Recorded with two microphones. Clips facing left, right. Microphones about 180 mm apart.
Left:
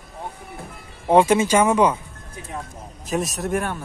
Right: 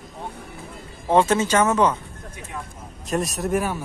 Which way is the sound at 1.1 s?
15° left (ahead or behind).